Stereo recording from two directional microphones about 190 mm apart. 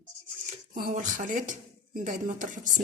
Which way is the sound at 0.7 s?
45° right (ahead or behind).